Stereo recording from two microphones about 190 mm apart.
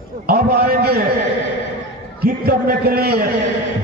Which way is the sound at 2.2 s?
55° right (ahead or behind).